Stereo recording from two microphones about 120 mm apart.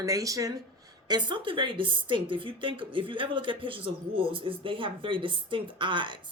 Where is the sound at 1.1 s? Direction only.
40° right (ahead or behind).